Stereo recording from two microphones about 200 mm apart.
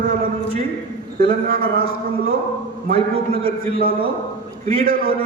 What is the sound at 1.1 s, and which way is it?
A man's voice, 45° right (ahead or behind).